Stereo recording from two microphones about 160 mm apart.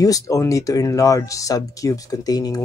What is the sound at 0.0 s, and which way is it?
Speech, 20° left (ahead or behind).